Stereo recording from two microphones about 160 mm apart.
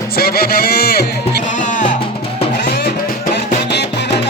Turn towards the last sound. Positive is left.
turn(degrees=90)